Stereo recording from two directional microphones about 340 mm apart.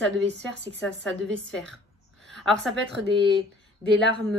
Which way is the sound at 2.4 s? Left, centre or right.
Centre.